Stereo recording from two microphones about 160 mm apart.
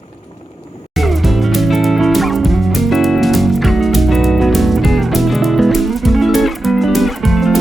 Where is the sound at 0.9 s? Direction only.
Centre (ahead or behind).